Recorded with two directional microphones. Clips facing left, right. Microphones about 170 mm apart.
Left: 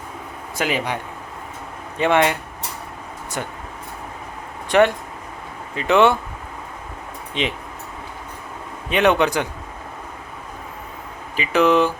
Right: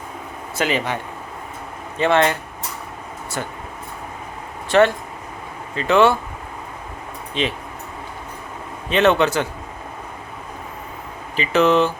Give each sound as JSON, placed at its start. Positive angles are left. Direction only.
{"t": 0.5, "sound": "a man's voice", "side_deg": 10}
{"t": 2.0, "sound": "a man's voice", "side_deg": 15}
{"t": 4.7, "sound": "a man's voice", "side_deg": 15}
{"t": 7.4, "sound": "a man's voice", "side_deg": 20}
{"t": 8.9, "sound": "a man's voice", "side_deg": 15}
{"t": 11.3, "sound": "a man's voice", "side_deg": 15}